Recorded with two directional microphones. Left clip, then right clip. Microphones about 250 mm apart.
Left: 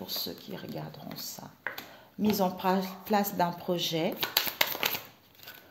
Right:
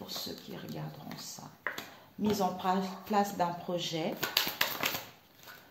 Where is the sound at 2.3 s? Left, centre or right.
Left.